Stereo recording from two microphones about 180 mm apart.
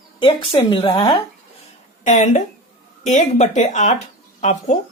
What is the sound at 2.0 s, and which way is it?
Speech, 45° left (ahead or behind).